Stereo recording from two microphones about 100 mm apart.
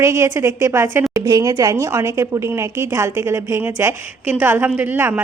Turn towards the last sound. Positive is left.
turn(degrees=-20)  # may be behind; listen again after turning